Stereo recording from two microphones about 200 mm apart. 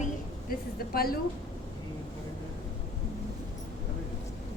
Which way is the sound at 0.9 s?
50° left (ahead or behind).